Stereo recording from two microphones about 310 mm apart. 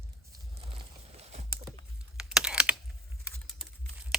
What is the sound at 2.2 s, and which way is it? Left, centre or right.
Computer keyboard, centre.